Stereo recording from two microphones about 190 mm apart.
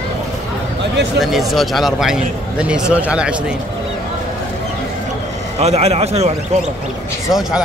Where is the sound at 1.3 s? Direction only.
Centre (ahead or behind).